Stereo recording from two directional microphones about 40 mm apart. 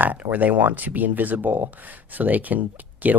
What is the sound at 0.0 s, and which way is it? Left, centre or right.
Speech, right.